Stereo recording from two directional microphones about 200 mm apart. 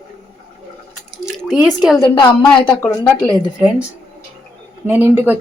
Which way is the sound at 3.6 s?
5° right (ahead or behind).